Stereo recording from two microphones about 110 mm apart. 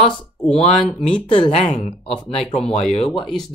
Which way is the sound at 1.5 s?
65° left (ahead or behind).